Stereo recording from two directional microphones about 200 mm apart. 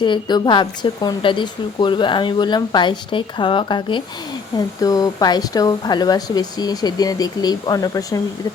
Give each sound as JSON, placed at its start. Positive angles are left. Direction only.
{"t": 0.0, "sound": "a woman's voice", "side_deg": 20}